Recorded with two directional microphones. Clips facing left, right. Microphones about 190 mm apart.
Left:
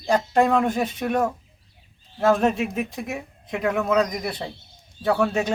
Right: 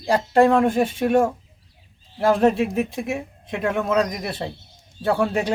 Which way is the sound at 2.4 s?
30° right (ahead or behind).